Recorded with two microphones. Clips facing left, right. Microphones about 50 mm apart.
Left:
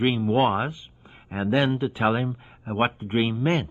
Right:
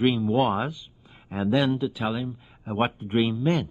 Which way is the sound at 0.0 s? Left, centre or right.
Left.